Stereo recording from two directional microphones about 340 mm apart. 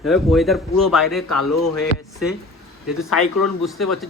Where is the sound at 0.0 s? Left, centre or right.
Centre.